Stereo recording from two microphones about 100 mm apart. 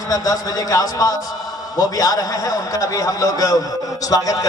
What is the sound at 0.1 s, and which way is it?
A man's voice, 35° left (ahead or behind).